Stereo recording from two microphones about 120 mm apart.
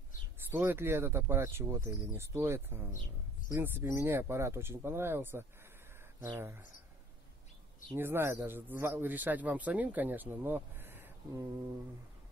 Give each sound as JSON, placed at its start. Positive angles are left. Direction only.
{"t": 0.5, "sound": "speech", "side_deg": -15}
{"t": 7.9, "sound": "speech", "side_deg": -20}